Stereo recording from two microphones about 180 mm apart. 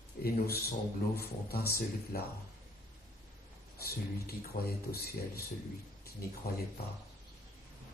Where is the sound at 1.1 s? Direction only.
60° left (ahead or behind).